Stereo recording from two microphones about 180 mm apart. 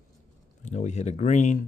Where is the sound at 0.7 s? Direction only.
40° left (ahead or behind).